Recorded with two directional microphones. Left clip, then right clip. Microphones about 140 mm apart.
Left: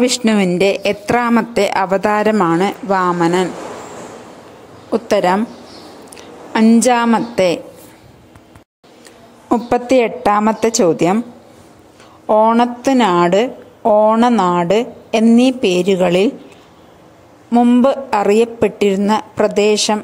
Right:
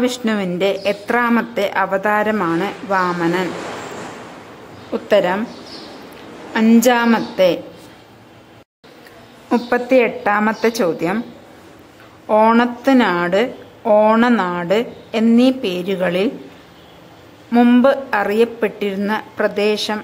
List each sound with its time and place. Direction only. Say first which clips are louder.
0.0 s a woman's voice: left 5 dB; 55° left (ahead or behind)
2.3 s a woman's voice: left 5 dB; 45° left (ahead or behind)
4.9 s a woman's voice: left 2 dB; 55° left (ahead or behind)
6.8 s a woman's voice: left 1 dB; 45° left (ahead or behind)
9.5 s a woman's voice: left 2 dB; 55° left (ahead or behind)
12.5 s a woman's voice: left 1 dB; 45° left (ahead or behind)
17.5 s a sound: left 1 dB; 30° left (ahead or behind)
17.8 s a woman's voice: left 2 dB; 50° left (ahead or behind)